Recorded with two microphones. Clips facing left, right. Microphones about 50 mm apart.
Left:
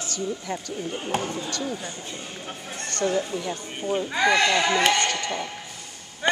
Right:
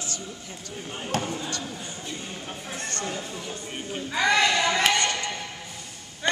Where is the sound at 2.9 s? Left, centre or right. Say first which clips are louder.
Left 9 dB; centre.